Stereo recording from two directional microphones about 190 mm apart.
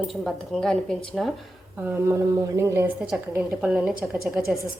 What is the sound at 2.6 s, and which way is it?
A woman's voice, 15° right (ahead or behind).